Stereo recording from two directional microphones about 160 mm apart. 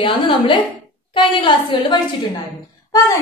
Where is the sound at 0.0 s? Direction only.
30° left (ahead or behind).